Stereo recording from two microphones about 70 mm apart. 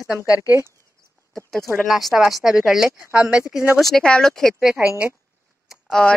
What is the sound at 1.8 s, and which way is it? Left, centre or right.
Speech, centre.